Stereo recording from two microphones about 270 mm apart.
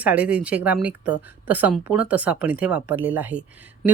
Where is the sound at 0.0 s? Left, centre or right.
Centre.